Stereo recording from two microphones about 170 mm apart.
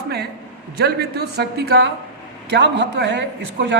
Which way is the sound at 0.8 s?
75° right (ahead or behind).